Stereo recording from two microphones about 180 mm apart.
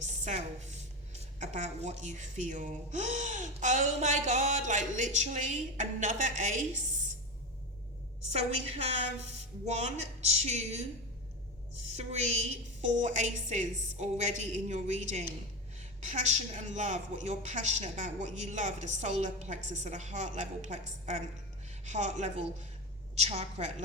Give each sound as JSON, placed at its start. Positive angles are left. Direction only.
{"t": 0.3, "sound": "a woman's voice", "side_deg": -40}
{"t": 8.3, "sound": "a woman's voice", "side_deg": -35}
{"t": 11.9, "sound": "a woman's voice", "side_deg": -40}